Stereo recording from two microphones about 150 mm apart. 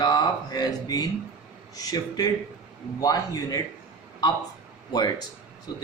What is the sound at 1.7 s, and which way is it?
Speech, 25° left (ahead or behind).